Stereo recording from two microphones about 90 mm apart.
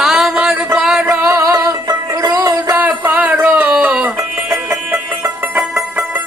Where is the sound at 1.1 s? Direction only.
30° right (ahead or behind).